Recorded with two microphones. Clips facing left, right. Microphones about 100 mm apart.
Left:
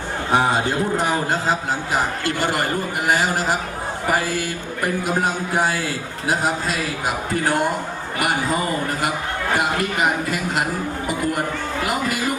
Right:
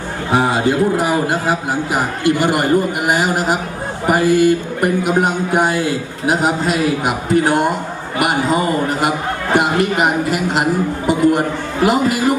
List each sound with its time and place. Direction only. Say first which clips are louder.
0.3 s a man's voice: right 4 dB; centre (ahead or behind); by 12.4 s 20° right (ahead or behind)